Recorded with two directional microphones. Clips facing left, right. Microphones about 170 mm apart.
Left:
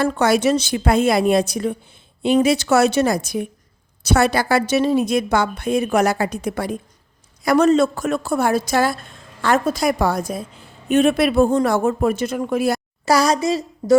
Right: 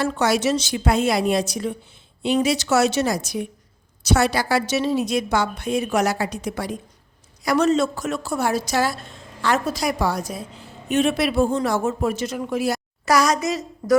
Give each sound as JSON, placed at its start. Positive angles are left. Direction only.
{"t": 0.0, "sound": "a woman's voice", "side_deg": 55}
{"t": 13.1, "sound": "a woman's voice", "side_deg": 30}